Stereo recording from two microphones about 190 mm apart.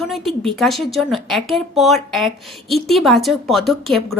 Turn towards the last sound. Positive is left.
turn(degrees=0)  # may be behind; listen again after turning